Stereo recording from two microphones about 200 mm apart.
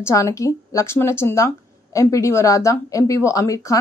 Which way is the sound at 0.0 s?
15° left (ahead or behind).